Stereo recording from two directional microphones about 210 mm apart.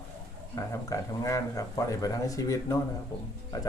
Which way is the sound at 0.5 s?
15° left (ahead or behind).